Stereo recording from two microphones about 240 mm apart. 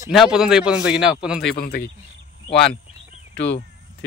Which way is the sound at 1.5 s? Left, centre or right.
Left.